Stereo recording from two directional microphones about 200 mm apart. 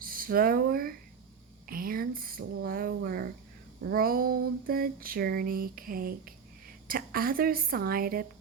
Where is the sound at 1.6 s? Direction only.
45° right (ahead or behind).